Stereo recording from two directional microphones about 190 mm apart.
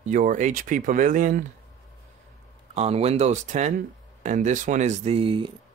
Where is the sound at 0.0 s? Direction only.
45° right (ahead or behind).